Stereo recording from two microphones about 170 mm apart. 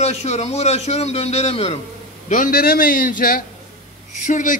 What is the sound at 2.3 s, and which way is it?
A man's voice, 55° left (ahead or behind).